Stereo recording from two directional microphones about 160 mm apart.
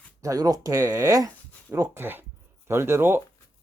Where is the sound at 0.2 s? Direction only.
20° right (ahead or behind).